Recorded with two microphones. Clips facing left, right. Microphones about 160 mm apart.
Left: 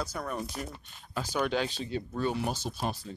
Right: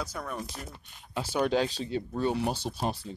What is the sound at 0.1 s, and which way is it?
Speech, 5° left (ahead or behind).